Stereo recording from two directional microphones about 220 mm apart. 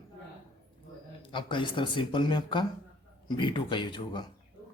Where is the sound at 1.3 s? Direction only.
20° left (ahead or behind).